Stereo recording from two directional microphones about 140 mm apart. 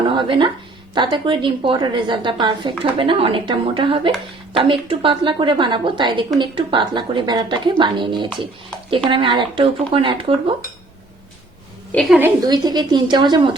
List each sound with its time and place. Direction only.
0.1 s a woman's voice: 35° right (ahead or behind)
11.9 s a woman's voice: 5° left (ahead or behind)
12.5 s a woman's voice: 30° right (ahead or behind)